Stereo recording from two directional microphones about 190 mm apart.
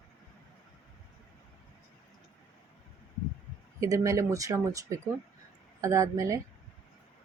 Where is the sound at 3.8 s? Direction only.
15° right (ahead or behind).